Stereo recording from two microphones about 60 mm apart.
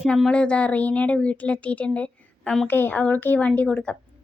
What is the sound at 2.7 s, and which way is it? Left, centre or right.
Speech, left.